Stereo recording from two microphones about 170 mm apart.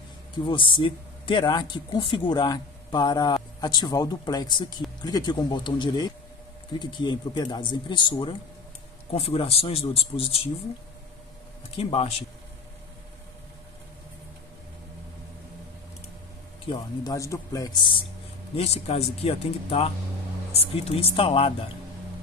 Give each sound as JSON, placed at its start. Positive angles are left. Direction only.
{"t": 0.5, "sound": "a man's voice", "side_deg": 30}
{"t": 11.8, "sound": "a man's voice", "side_deg": 35}
{"t": 16.6, "sound": "a man's voice", "side_deg": 30}
{"t": 17.1, "sound": "speech", "side_deg": 20}
{"t": 18.6, "sound": "a man's voice", "side_deg": 40}